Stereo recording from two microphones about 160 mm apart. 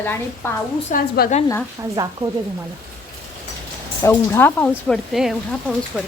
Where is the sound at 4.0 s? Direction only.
15° left (ahead or behind).